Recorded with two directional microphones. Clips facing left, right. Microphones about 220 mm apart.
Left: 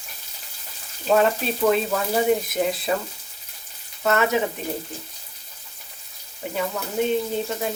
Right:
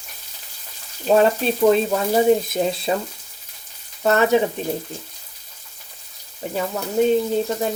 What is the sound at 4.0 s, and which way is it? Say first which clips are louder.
Frying: right 4 dB; 35° right (ahead or behind).